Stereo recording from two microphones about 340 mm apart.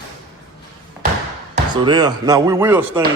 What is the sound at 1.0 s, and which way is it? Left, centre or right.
Basketball bounce, centre.